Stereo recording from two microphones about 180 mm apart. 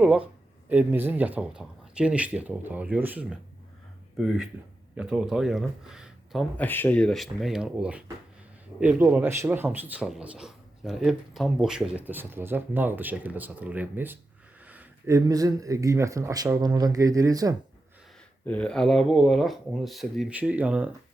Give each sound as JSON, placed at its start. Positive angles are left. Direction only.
{"t": 0.0, "sound": "speech", "side_deg": -5}
{"t": 6.7, "sound": "speech", "side_deg": 10}
{"t": 18.4, "sound": "speech", "side_deg": 5}